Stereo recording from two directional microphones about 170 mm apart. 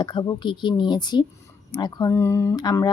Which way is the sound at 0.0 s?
25° left (ahead or behind).